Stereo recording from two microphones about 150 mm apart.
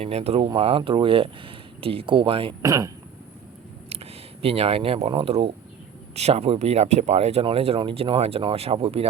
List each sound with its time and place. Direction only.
0.0 s speech: 45° right (ahead or behind)
2.6 s speech: 25° right (ahead or behind)
3.8 s speech: 40° right (ahead or behind)